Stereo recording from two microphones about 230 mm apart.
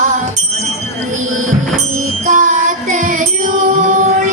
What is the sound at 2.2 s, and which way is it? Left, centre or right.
Music, right.